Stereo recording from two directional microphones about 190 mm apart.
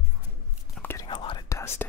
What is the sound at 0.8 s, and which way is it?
Whispering, 10° left (ahead or behind).